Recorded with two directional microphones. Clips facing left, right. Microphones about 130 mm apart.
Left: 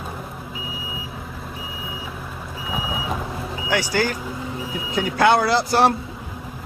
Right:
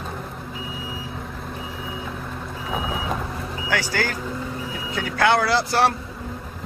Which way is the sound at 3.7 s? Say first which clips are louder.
Left 3 dB; 20° left (ahead or behind).